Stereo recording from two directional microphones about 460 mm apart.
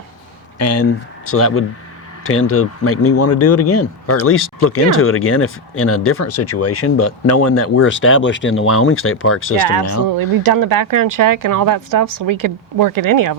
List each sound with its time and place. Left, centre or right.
0.6 s a man's voice: left
10.2 s speech: right